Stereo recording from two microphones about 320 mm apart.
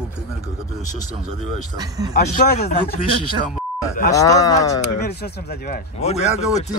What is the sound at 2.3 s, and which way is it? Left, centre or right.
Speech, left.